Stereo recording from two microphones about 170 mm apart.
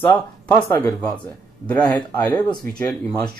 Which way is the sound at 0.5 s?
15° left (ahead or behind).